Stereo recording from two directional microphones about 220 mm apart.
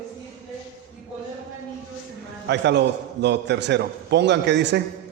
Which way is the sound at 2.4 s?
50° right (ahead or behind).